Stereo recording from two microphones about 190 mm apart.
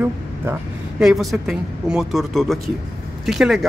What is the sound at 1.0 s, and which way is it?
A woman's voice, centre (ahead or behind).